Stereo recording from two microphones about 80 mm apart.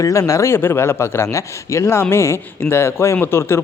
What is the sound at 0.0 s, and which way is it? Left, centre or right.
Speech, left.